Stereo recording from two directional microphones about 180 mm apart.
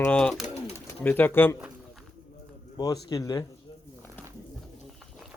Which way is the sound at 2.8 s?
20° left (ahead or behind).